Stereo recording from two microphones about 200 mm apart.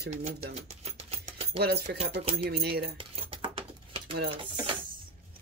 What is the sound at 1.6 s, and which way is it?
Speech, 55° right (ahead or behind).